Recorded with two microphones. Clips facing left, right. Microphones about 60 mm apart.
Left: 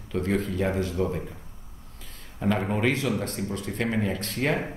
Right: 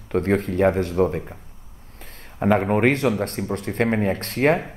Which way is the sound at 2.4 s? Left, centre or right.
Right.